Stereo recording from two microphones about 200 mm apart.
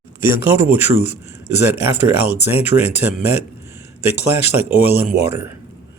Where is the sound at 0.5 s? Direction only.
10° right (ahead or behind).